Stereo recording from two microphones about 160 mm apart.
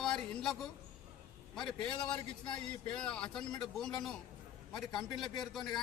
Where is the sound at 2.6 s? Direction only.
5° left (ahead or behind).